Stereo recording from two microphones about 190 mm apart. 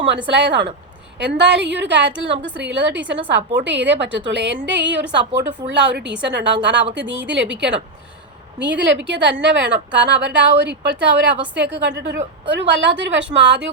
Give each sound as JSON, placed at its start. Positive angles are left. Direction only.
{"t": 0.3, "sound": "a woman's voice", "side_deg": -65}
{"t": 9.0, "sound": "a woman's voice", "side_deg": -70}